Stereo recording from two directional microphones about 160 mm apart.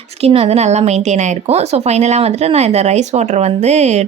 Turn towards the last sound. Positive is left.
turn(degrees=-45)  # may be behind; listen again after turning